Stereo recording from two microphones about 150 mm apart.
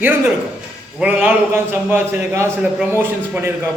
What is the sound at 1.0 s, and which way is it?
A man's voice, 10° right (ahead or behind).